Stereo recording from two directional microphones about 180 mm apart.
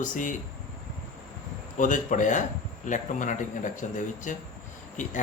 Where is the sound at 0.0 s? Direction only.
45° left (ahead or behind).